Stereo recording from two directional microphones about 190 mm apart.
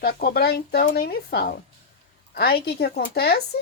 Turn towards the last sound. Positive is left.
turn(degrees=55)  # may be behind; listen again after turning